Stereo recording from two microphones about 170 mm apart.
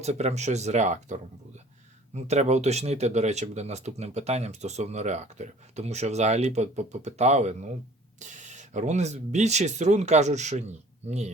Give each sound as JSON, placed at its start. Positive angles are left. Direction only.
{"t": 0.0, "sound": "speech", "side_deg": -40}